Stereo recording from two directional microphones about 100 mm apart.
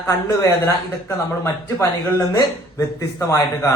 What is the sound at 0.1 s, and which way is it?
Speech, 30° left (ahead or behind).